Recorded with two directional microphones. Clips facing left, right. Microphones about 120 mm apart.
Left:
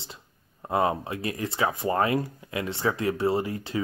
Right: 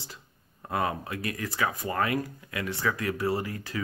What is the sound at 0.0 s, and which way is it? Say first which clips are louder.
Speech: left 1 dB; 25° left (ahead or behind).